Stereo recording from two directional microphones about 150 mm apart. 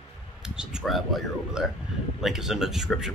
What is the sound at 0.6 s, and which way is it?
Speech, centre (ahead or behind).